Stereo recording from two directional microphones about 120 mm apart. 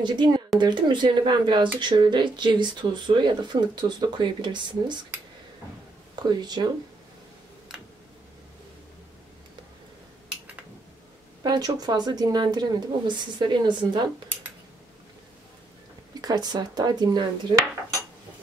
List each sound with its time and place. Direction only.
0.0 s speech: 40° right (ahead or behind)
6.2 s speech: 35° right (ahead or behind)
11.4 s speech: 35° right (ahead or behind)
16.2 s speech: 35° right (ahead or behind)